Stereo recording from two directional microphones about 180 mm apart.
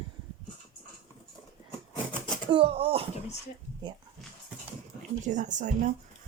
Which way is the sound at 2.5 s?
30° right (ahead or behind).